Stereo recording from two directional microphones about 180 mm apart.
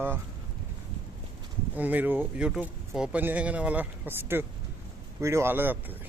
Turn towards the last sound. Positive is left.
turn(degrees=-10)  # may be behind; listen again after turning